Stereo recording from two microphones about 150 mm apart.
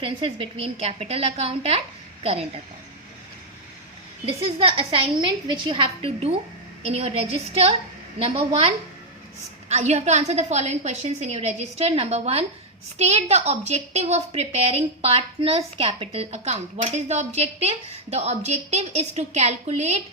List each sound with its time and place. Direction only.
0.0 s a woman's voice: 35° right (ahead or behind)
4.4 s a woman's voice: 40° right (ahead or behind)